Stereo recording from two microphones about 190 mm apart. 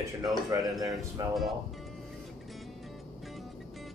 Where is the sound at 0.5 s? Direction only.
20° right (ahead or behind).